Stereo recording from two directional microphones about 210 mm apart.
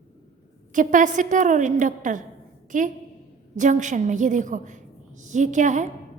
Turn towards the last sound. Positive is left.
turn(degrees=-35)  # may be behind; listen again after turning